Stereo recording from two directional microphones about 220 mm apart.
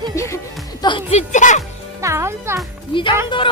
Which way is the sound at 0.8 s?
20° left (ahead or behind).